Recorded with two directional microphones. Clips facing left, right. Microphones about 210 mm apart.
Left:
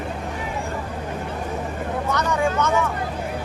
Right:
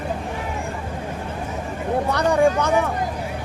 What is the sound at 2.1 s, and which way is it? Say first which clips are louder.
Vehicle: right 5 dB; 35° right (ahead or behind).